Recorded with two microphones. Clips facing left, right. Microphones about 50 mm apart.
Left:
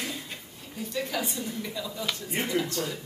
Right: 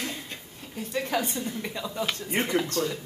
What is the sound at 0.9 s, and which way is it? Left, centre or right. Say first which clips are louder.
A woman's voice: right 3 dB; right.